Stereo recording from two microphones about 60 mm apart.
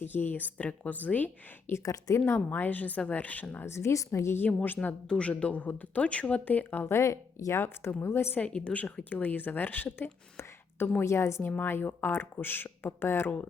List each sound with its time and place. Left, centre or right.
0.0 s speech: left
1.8 s speech: left
2.1 s a woman's voice: left
2.5 s speech: left
4.4 s speech: left
5.0 s speech: centre
6.8 s a woman's voice: left
8.4 s speech: centre; by 10.1 s left
11.0 s a woman's voice: left
11.4 s speech: left